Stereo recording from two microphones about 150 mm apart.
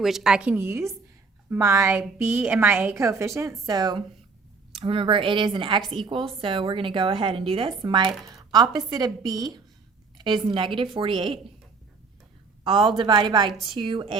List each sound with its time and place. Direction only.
0.0 s a woman's voice: centre (ahead or behind); by 11.1 s 35° right (ahead or behind)
12.6 s a woman's voice: 30° right (ahead or behind)